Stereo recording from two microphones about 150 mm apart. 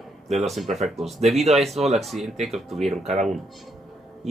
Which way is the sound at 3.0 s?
45° right (ahead or behind).